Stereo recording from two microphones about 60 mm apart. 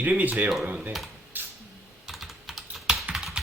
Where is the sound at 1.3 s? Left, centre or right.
Right.